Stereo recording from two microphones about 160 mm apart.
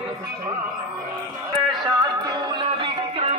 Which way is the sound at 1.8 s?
25° right (ahead or behind).